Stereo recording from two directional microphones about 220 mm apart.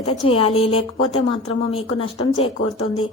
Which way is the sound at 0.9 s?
60° left (ahead or behind).